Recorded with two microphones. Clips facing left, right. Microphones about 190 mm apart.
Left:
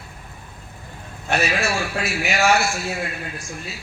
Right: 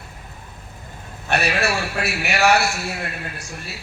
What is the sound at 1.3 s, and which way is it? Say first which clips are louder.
A man's voice: right 1 dB; 65° right (ahead or behind).